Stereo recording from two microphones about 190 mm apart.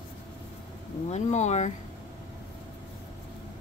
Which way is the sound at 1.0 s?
35° left (ahead or behind).